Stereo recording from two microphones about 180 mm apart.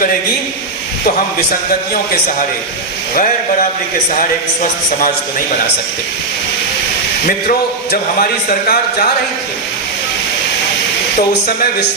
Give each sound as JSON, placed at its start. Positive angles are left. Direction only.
{"t": 7.3, "sound": "speech", "side_deg": 55}